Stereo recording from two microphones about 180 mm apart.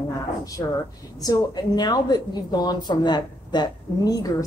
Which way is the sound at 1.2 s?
25° left (ahead or behind).